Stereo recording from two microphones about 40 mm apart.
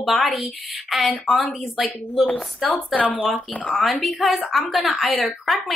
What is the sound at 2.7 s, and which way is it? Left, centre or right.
Speech, left.